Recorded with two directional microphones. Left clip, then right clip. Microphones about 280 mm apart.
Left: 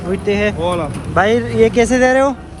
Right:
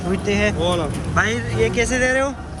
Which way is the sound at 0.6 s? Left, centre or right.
Left.